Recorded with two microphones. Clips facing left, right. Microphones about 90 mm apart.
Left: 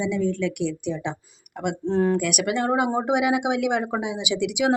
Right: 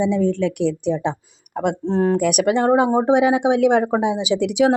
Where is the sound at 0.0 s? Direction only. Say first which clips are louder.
Right 5 dB; 35° right (ahead or behind).